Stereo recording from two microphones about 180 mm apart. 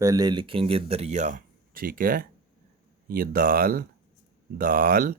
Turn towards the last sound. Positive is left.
turn(degrees=-50)  # may be behind; listen again after turning